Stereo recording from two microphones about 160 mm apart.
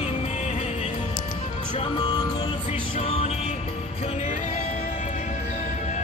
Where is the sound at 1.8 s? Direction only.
25° left (ahead or behind); by 4.6 s 50° left (ahead or behind).